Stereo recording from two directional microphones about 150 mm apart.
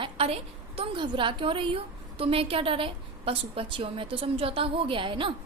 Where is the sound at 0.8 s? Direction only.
35° right (ahead or behind).